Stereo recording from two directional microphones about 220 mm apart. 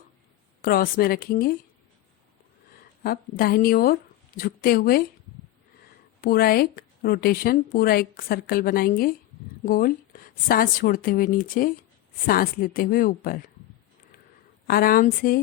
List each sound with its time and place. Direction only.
0.6 s a woman's voice: 40° left (ahead or behind)
3.0 s a woman's voice: 45° left (ahead or behind)
6.2 s a woman's voice: 45° left (ahead or behind)
14.7 s speech: 40° left (ahead or behind)